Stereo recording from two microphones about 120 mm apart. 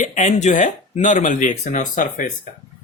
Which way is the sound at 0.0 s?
85° left.